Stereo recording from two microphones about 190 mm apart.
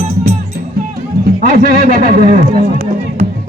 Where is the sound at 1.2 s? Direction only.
50° right (ahead or behind).